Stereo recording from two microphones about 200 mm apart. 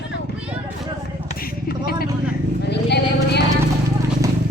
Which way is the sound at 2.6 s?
55° left (ahead or behind).